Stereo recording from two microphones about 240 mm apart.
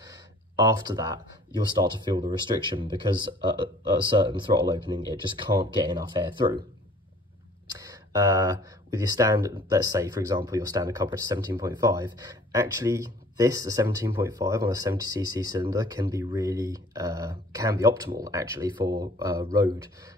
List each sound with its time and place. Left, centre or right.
0.0 s a sound: centre
1.8 s speech: centre
7.8 s speech: centre